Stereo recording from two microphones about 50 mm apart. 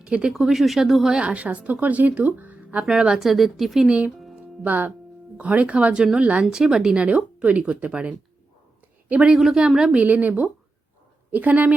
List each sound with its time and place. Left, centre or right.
0.0 s speech: right
0.3 s speech: centre
1.1 s speech: right
2.8 s speech: centre
3.8 s speech: right
4.4 s music: right
5.4 s speech: right
6.5 s speech: centre
6.9 s speech: right
9.3 s speech: centre
9.9 s a woman's voice: right